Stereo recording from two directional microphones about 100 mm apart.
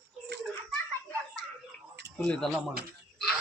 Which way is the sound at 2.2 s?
5° left (ahead or behind).